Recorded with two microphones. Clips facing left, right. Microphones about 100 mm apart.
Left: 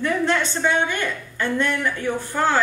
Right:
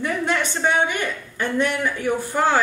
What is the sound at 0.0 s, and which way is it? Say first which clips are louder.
A woman's voice: left 2 dB; 15° right (ahead or behind).